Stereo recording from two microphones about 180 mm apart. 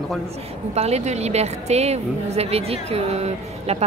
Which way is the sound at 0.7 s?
35° right (ahead or behind).